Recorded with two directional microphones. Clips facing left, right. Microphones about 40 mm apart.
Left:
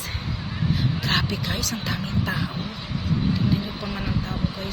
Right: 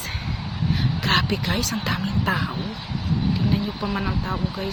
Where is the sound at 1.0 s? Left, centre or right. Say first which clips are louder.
Right 6 dB; right.